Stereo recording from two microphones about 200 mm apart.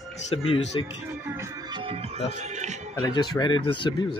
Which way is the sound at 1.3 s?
15° right (ahead or behind).